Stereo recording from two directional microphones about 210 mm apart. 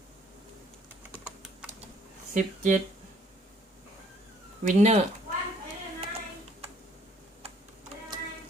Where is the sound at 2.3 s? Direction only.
35° right (ahead or behind).